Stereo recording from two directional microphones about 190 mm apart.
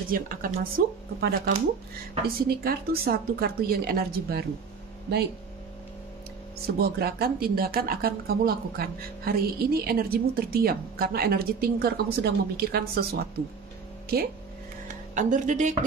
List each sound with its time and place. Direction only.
0.1 s speech: 45° right (ahead or behind)
6.8 s speech: 55° right (ahead or behind)
15.1 s speech: 40° right (ahead or behind)